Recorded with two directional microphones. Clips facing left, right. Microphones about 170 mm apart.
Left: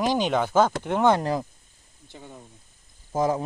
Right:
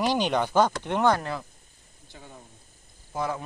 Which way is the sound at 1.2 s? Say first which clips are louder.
Left 7 dB; 35° left (ahead or behind).